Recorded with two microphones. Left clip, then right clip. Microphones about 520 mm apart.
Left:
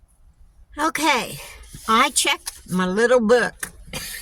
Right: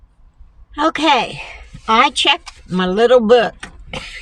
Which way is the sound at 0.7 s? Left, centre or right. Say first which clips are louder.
Right 6 dB; left.